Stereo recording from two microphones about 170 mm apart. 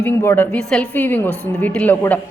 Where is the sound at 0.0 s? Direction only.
15° left (ahead or behind).